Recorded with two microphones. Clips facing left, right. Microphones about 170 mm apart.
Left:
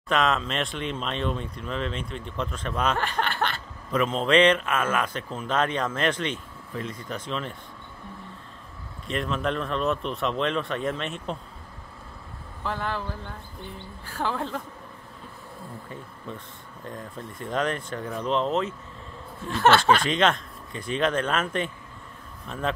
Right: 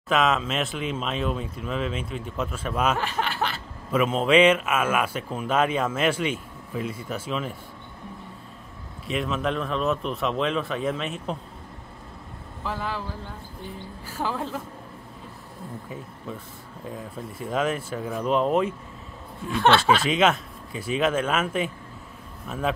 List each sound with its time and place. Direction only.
0.1 s speech: centre (ahead or behind)
9.0 s speech: 5° right (ahead or behind)
12.6 s speech: 5° right (ahead or behind)
14.0 s speech: 5° right (ahead or behind)
16.8 s speech: 5° right (ahead or behind)
19.4 s speech: centre (ahead or behind)